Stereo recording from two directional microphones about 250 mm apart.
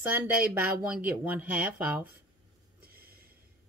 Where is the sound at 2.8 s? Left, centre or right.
Right.